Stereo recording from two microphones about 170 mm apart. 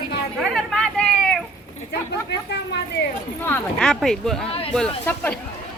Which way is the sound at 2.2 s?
80° left.